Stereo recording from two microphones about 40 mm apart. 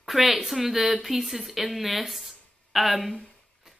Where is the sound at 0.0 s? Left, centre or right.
Centre.